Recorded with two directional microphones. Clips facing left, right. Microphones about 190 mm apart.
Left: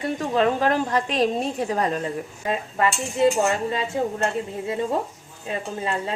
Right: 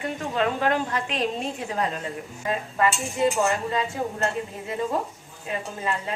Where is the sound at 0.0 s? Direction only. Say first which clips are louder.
Left 4 dB; 35° left (ahead or behind).